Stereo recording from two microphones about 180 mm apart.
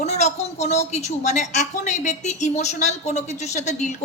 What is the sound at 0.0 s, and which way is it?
A woman's voice, 40° left (ahead or behind).